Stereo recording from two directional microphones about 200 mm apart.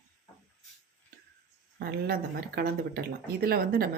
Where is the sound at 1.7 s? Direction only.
50° right (ahead or behind).